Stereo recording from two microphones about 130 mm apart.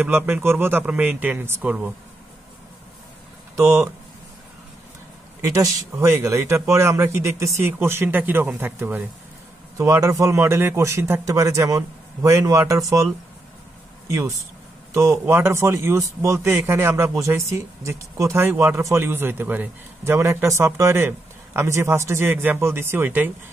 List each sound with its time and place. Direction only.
0.0 s speech: 15° right (ahead or behind)
3.5 s speech: 25° right (ahead or behind)
5.5 s speech: 20° right (ahead or behind)